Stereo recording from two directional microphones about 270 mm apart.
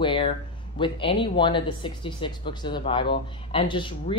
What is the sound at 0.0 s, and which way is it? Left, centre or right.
Speech, centre.